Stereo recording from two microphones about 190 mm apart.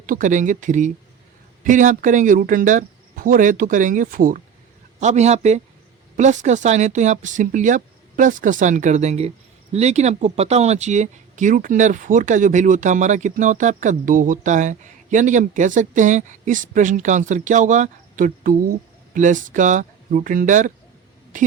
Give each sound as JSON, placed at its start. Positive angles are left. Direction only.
{"t": 0.0, "sound": "speech", "side_deg": -45}